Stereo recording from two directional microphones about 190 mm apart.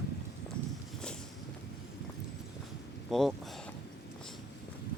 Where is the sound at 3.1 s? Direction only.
Centre (ahead or behind).